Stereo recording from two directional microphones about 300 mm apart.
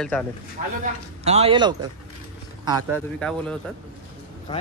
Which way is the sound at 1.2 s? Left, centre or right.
Right.